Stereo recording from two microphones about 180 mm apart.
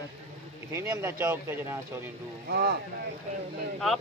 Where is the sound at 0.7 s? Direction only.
15° right (ahead or behind).